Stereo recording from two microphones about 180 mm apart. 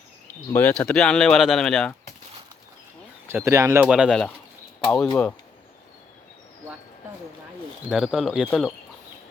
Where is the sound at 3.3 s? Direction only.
15° right (ahead or behind).